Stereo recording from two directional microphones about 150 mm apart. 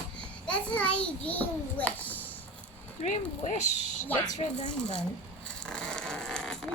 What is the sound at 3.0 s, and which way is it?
Speech, 50° left (ahead or behind).